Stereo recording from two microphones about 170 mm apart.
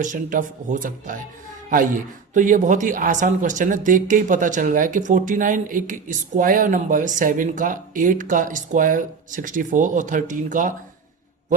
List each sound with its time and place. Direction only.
0.0 s speech: 50° right (ahead or behind)
2.3 s speech: 50° right (ahead or behind)